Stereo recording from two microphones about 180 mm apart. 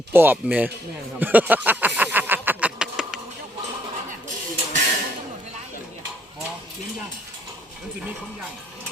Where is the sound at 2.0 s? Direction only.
10° right (ahead or behind).